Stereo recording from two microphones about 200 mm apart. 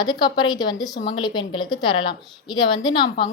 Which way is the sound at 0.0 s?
20° left (ahead or behind).